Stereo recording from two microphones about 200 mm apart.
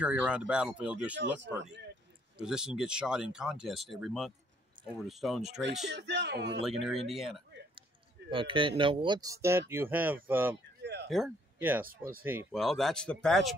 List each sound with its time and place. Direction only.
0.0 s speech: 5° right (ahead or behind)
2.4 s speech: 5° right (ahead or behind)
5.9 s speech: 60° right (ahead or behind)
6.8 s speech: centre (ahead or behind)
8.3 s speech: 25° right (ahead or behind)
10.8 s a sound: 60° right (ahead or behind)
11.1 s speech: centre (ahead or behind)
11.8 s speech: 45° right (ahead or behind)
12.2 s speech: 10° right (ahead or behind)
12.5 s speech: centre (ahead or behind)